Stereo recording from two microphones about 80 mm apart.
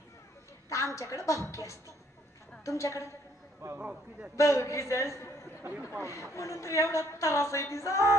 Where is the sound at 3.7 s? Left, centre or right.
Centre.